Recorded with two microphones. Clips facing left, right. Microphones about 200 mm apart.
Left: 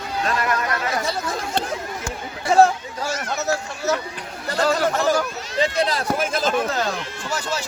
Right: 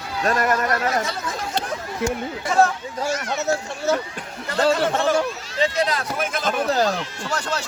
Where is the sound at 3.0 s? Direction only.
25° right (ahead or behind).